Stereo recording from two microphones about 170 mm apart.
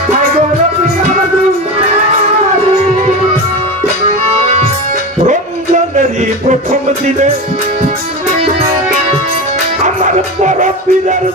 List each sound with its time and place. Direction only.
10.4 s music: 45° right (ahead or behind)